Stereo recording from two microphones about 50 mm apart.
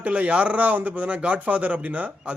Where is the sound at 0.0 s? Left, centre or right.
Right.